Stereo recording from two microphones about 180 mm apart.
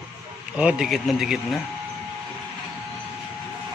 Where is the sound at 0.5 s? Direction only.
5° right (ahead or behind).